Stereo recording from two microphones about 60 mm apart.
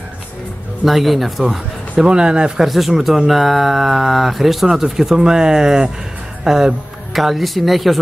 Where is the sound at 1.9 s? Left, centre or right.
Centre.